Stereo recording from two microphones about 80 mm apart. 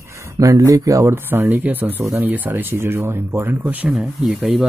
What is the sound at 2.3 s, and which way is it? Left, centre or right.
Speech, right.